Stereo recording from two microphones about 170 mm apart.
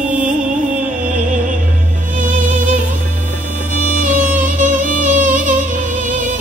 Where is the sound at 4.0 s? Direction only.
50° right (ahead or behind).